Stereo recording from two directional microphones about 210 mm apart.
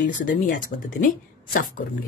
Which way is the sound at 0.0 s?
40° left (ahead or behind).